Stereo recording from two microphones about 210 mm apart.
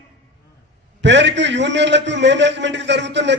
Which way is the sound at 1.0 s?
55° right (ahead or behind).